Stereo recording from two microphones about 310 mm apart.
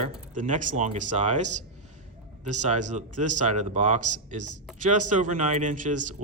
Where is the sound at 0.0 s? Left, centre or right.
Right.